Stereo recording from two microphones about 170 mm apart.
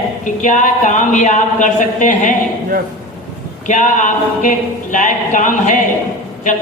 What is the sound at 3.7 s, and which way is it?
A man's voice, 50° left (ahead or behind).